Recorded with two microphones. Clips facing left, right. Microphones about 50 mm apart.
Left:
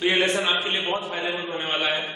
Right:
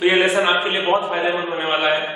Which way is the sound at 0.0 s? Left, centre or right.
Centre.